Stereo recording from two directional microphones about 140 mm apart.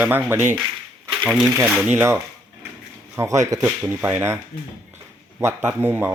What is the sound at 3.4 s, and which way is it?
Speech, 25° right (ahead or behind).